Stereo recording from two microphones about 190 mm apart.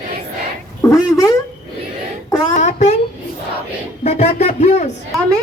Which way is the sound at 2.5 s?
40° left (ahead or behind).